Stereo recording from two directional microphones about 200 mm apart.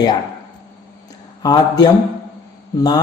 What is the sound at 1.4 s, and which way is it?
Speech, 20° left (ahead or behind).